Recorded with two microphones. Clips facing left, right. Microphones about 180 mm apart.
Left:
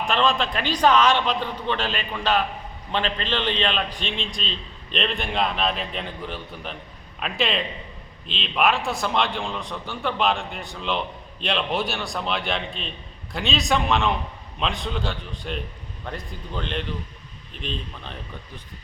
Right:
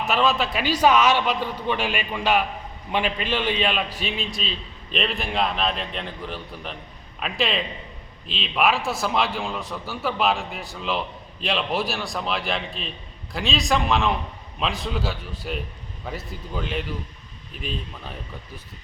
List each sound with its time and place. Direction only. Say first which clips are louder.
0.0 s a man's voice: even; 5° right (ahead or behind)